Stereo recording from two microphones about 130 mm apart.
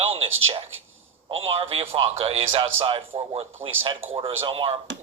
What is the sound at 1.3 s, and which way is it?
Speech, 45° right (ahead or behind).